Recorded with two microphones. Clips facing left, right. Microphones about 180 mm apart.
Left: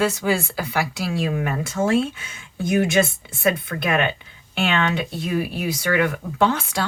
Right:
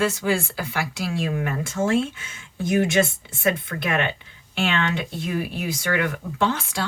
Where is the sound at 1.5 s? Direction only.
35° left (ahead or behind).